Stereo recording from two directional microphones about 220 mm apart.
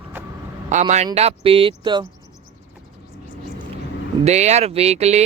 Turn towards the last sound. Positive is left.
turn(degrees=-30)  # may be behind; listen again after turning